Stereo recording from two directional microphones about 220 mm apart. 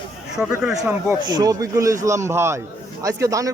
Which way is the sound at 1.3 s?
15° right (ahead or behind).